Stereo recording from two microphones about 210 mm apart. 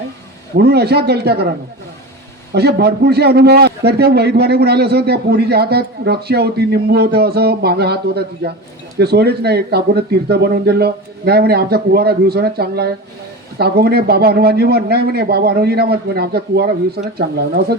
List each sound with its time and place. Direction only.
0.5 s a man's voice: 50° right (ahead or behind)